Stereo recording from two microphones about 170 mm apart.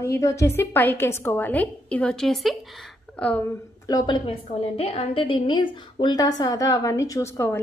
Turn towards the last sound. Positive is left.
turn(degrees=15)  # may be behind; listen again after turning